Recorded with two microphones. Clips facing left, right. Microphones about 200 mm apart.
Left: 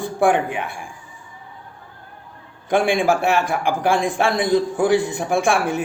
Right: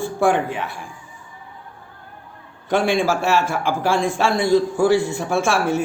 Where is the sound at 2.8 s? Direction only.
15° left (ahead or behind).